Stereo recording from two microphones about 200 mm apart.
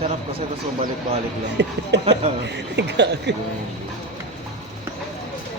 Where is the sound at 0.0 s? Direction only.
30° right (ahead or behind).